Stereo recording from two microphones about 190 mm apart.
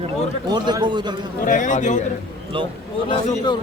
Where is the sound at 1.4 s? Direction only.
40° left (ahead or behind).